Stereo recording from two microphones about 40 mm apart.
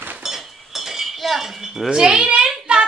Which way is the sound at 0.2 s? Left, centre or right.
Centre.